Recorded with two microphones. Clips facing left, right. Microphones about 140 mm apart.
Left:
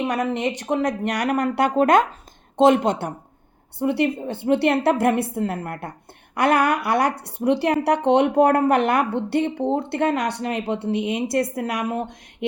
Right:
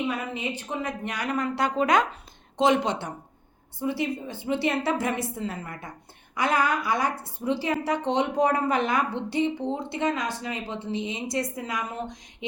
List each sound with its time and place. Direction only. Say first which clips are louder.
0.0 s a woman's voice: left 7 dB; 80° left; by 3.1 s 55° left (ahead or behind)
3.8 s a woman's voice: left 7 dB; 65° left (ahead or behind)